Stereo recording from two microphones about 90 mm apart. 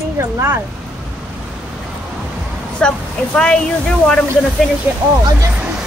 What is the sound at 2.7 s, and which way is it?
Speech, 10° left (ahead or behind).